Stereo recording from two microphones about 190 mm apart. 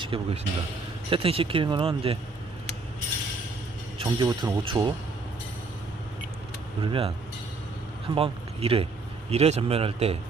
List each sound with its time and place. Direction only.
0.1 s speech: 25° right (ahead or behind)
3.9 s speech: 25° right (ahead or behind)
6.8 s speech: 30° right (ahead or behind)
8.1 s a man's voice: 30° right (ahead or behind)